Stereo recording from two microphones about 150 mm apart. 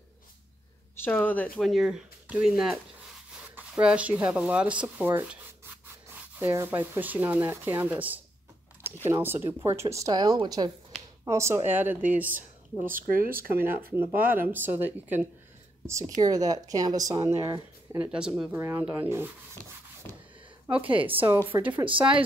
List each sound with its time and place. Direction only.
0.9 s speech: 10° left (ahead or behind)
1.6 s speech: centre (ahead or behind)
6.4 s speech: 15° right (ahead or behind)
12.9 s speech: 70° right (ahead or behind)
13.9 s speech: 15° right (ahead or behind)
16.2 s speech: 25° right (ahead or behind)
20.8 s speech: 35° right (ahead or behind)
21.5 s speech: 10° right (ahead or behind)
21.8 s speech: 35° right (ahead or behind)